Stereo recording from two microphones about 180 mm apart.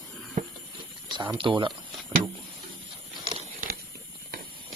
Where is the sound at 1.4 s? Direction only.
25° right (ahead or behind).